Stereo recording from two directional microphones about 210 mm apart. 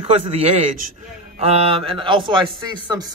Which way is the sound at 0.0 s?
30° right (ahead or behind).